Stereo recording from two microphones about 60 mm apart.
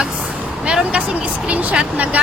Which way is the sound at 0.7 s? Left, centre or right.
Centre.